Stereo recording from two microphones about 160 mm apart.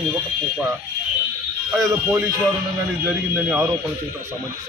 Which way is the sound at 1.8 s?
20° right (ahead or behind).